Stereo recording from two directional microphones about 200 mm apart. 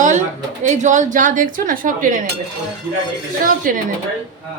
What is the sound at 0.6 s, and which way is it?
Speech, 40° right (ahead or behind).